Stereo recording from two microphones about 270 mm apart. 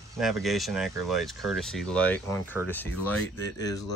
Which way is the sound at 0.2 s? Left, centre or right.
Centre.